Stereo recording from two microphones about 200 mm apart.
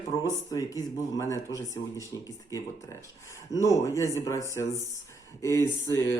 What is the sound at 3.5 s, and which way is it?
Speech, 15° left (ahead or behind).